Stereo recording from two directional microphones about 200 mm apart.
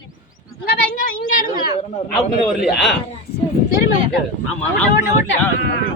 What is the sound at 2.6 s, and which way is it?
Speech, centre (ahead or behind).